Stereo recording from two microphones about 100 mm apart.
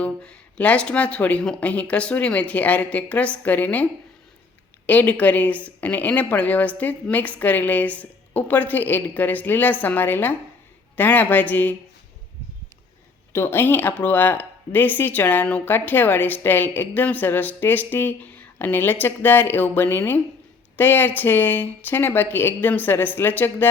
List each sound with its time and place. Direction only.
0.0 s speech: 10° left (ahead or behind)
4.9 s speech: 15° left (ahead or behind)
13.3 s speech: 25° left (ahead or behind)